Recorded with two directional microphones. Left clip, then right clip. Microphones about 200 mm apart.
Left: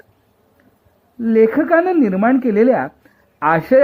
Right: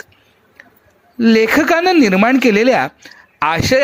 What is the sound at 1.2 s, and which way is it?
Speech, 25° right (ahead or behind).